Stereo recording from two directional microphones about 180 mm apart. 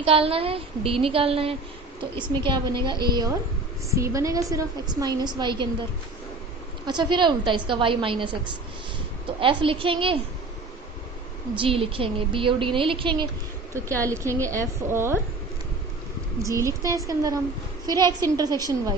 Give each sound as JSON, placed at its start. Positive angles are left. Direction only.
{"t": 0.0, "sound": "a woman's voice", "side_deg": -30}
{"t": 6.8, "sound": "a woman's voice", "side_deg": -25}
{"t": 11.5, "sound": "a woman's voice", "side_deg": -30}
{"t": 13.7, "sound": "a woman's voice", "side_deg": -15}
{"t": 16.5, "sound": "a woman's voice", "side_deg": -15}